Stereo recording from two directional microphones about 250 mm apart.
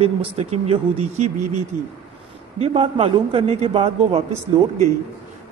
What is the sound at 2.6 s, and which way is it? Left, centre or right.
Speech, right.